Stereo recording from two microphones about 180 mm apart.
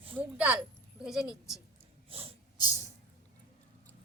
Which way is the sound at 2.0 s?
30° right (ahead or behind).